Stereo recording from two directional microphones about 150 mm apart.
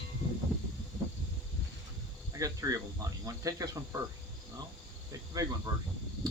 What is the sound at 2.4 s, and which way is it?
Speech, 20° right (ahead or behind).